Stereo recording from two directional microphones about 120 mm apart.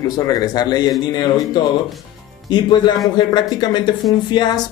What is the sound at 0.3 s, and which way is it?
Speech, 35° left (ahead or behind).